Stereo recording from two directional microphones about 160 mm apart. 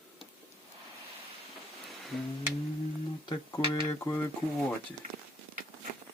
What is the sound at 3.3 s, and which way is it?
Speech, 25° left (ahead or behind).